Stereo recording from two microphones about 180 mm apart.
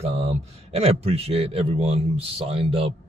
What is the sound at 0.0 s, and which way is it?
A man's voice, 35° right (ahead or behind).